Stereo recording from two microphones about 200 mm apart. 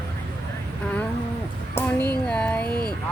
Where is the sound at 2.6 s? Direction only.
50° left (ahead or behind).